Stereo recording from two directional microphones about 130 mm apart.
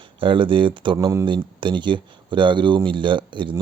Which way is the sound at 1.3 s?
40° right (ahead or behind).